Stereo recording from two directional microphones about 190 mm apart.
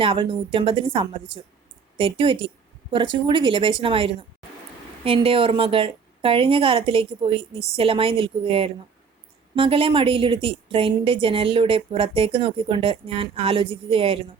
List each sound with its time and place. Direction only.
0.0 s a woman's voice: 25° right (ahead or behind)